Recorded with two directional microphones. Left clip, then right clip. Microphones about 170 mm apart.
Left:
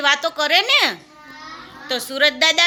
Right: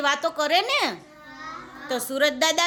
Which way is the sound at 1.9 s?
20° right (ahead or behind).